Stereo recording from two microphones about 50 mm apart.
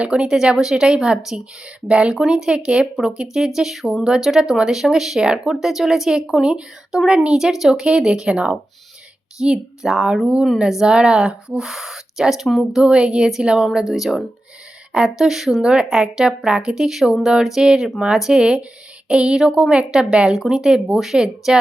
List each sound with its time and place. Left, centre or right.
0.0 s speech: centre
12.8 s speech: centre
13.8 s speech: centre
15.6 s speech: centre